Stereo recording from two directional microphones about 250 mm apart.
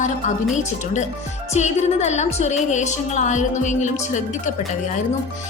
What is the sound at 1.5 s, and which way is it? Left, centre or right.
A woman's voice, left.